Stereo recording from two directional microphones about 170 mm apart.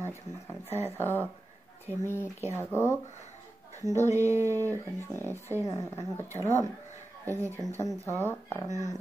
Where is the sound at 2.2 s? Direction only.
15° right (ahead or behind).